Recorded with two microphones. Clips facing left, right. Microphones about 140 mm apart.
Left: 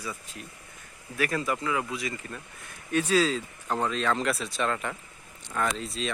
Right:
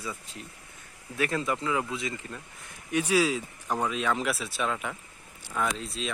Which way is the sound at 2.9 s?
10° right (ahead or behind).